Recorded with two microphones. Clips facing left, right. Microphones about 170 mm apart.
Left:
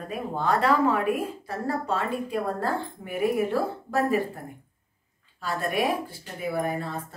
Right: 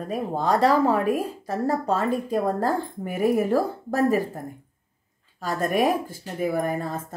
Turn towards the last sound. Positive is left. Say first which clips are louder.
# right 3 dB
turn(degrees=-45)  # may be behind; listen again after turning